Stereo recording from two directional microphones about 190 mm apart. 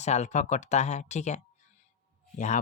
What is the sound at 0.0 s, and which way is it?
Speech, 35° left (ahead or behind).